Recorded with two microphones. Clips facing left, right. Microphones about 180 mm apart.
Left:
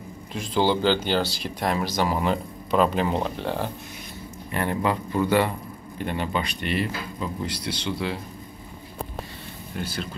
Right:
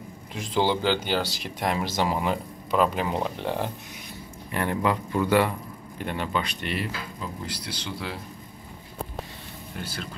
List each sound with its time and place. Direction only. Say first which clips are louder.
0.3 s speech: left 2 dB; 15° right (ahead or behind)
2.1 s speech: left 2 dB; 10° right (ahead or behind)
4.6 s speech: even; 10° left (ahead or behind)